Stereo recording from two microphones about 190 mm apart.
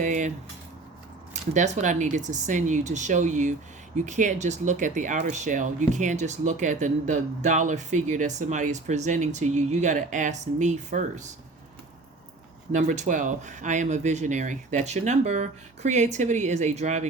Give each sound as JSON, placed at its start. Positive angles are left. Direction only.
{"t": 0.0, "sound": "a sound", "side_deg": -40}
{"t": 1.3, "sound": "speech", "side_deg": -40}
{"t": 12.7, "sound": "speech", "side_deg": -40}